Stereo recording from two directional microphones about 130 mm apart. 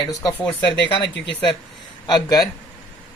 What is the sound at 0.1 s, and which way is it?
Speech, 25° left (ahead or behind).